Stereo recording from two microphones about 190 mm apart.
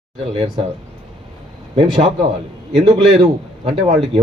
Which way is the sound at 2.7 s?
35° right (ahead or behind).